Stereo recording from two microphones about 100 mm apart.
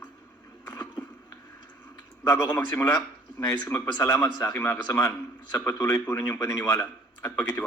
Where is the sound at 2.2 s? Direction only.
25° left (ahead or behind).